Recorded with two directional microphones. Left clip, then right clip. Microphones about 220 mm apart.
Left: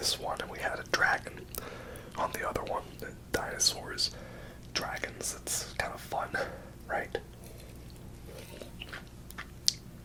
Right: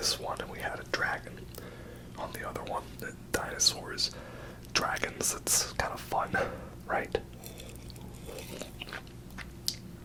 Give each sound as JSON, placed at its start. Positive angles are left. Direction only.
{"t": 0.0, "sound": "whispering", "side_deg": -5}
{"t": 0.3, "sound": "whispering", "side_deg": 5}
{"t": 1.5, "sound": "whispering", "side_deg": 40}
{"t": 2.6, "sound": "whispering", "side_deg": 20}
{"t": 3.3, "sound": "speech", "side_deg": 0}
{"t": 4.7, "sound": "speech", "side_deg": -50}